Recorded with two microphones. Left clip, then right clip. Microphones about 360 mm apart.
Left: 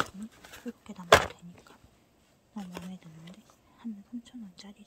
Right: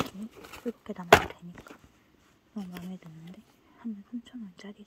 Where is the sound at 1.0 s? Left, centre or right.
Centre.